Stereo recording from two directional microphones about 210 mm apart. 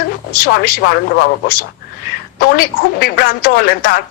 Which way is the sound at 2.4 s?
45° left (ahead or behind).